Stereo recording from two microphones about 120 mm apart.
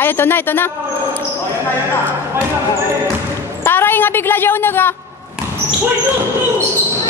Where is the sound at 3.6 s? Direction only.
20° left (ahead or behind).